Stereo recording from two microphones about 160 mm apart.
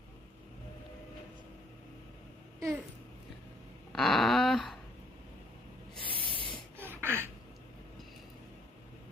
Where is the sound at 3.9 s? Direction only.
Centre (ahead or behind).